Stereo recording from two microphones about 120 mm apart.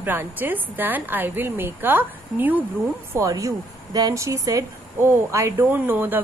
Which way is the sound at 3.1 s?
25° right (ahead or behind).